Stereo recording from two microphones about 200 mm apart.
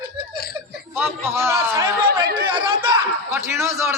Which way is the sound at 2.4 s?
25° right (ahead or behind).